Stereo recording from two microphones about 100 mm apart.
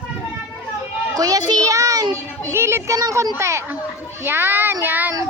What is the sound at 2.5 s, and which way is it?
Speech, 25° right (ahead or behind).